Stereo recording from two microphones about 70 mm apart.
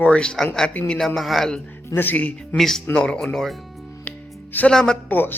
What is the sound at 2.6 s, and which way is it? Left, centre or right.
Speech, centre.